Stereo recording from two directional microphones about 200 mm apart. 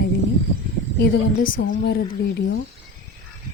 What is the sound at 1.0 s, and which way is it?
Speech, 45° left (ahead or behind).